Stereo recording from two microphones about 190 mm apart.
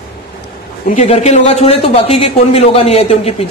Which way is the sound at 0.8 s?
35° left (ahead or behind).